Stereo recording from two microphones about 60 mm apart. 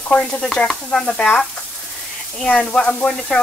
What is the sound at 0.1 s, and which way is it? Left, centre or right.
Stir, centre.